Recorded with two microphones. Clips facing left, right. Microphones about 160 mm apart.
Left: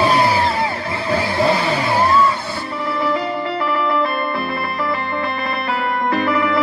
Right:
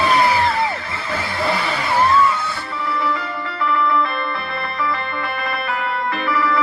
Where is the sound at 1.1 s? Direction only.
25° left (ahead or behind).